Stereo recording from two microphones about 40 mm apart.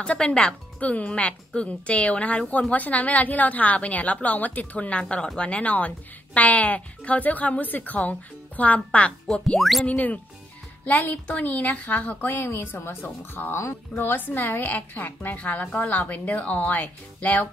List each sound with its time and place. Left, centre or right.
0.0 s speech: left
0.7 s speech: left
9.6 s speech: centre
9.8 s a woman's voice: left
11.3 s a woman's voice: left